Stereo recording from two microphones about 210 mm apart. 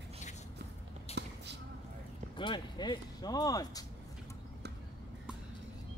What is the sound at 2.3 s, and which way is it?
Speech, 20° left (ahead or behind).